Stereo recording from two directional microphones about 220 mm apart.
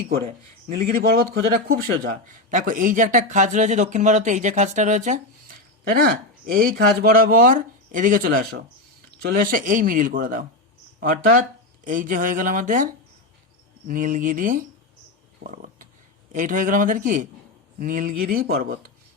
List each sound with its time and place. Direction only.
0.1 s speech: 40° right (ahead or behind)
15.4 s a sound: 35° right (ahead or behind)
16.3 s speech: 35° right (ahead or behind)